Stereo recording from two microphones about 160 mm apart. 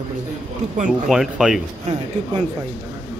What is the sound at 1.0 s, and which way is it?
Speech, 5° right (ahead or behind).